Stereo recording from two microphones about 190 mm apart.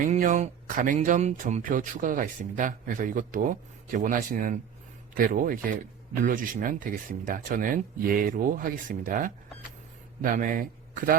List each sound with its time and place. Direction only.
0.0 s a man's voice: 45° right (ahead or behind)